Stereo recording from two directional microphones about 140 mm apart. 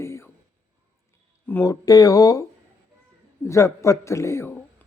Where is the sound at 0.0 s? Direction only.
20° left (ahead or behind).